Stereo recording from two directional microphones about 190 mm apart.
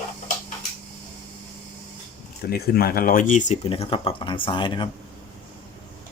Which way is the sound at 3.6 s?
30° left (ahead or behind).